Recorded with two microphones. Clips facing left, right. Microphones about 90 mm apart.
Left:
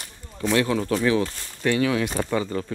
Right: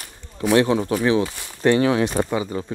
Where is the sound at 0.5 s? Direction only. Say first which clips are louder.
Right 4 dB; 20° right (ahead or behind).